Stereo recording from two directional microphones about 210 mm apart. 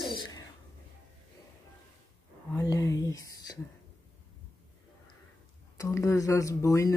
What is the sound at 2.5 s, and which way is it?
Whispering, 15° left (ahead or behind).